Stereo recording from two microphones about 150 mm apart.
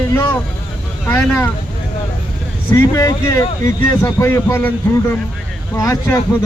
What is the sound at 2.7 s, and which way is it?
Speech, 20° left (ahead or behind).